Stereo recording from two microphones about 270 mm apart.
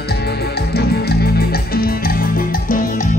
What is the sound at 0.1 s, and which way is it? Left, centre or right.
Music, left.